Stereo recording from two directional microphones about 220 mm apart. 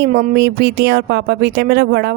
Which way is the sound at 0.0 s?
45° right (ahead or behind).